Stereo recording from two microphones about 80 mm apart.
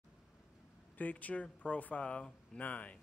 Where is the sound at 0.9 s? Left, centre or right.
Centre.